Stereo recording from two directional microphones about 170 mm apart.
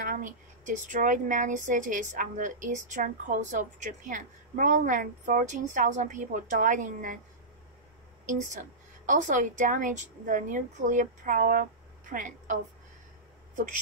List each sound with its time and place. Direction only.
0.0 s speech: 50° right (ahead or behind)
9.0 s a woman's voice: 50° right (ahead or behind)